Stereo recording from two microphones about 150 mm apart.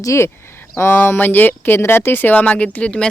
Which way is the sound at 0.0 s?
20° left (ahead or behind).